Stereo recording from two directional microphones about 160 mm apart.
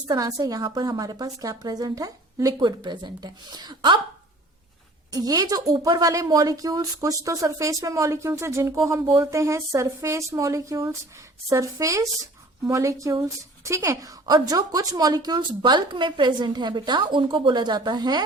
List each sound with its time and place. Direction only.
0.1 s a woman's voice: 20° right (ahead or behind)
5.1 s a woman's voice: 25° right (ahead or behind)